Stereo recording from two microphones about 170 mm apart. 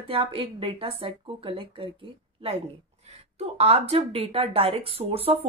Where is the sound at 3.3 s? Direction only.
35° right (ahead or behind).